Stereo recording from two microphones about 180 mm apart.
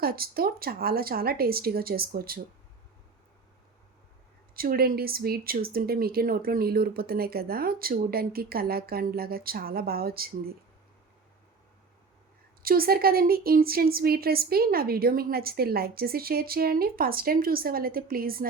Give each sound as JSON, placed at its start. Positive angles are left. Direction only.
{"t": 0.0, "sound": "speech", "side_deg": -55}
{"t": 4.5, "sound": "speech", "side_deg": -55}
{"t": 12.6, "sound": "speech", "side_deg": -55}